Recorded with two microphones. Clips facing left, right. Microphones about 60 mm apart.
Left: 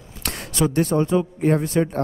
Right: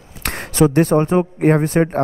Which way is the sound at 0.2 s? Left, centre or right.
Right.